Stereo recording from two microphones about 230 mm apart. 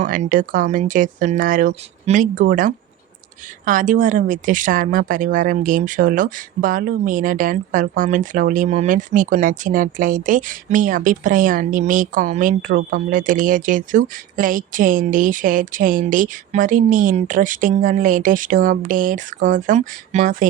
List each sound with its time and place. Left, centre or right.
0.0 s speech: right